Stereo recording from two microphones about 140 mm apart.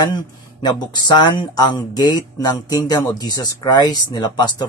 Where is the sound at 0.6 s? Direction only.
30° left (ahead or behind).